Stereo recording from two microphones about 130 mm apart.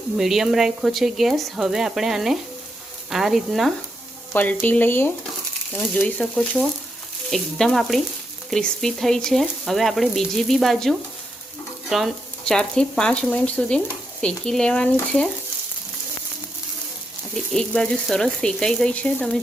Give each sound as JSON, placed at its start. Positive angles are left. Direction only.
{"t": 0.2, "sound": "frying", "side_deg": 0}
{"t": 4.6, "sound": "speech", "side_deg": 15}
{"t": 7.3, "sound": "frying", "side_deg": 5}
{"t": 11.9, "sound": "speech", "side_deg": 0}
{"t": 17.3, "sound": "frying", "side_deg": 5}